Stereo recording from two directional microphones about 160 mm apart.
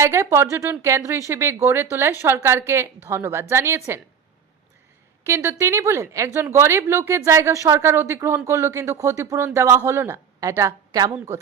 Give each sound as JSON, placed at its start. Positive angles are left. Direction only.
{"t": 0.0, "sound": "a woman's voice", "side_deg": -15}
{"t": 5.2, "sound": "a woman's voice", "side_deg": -15}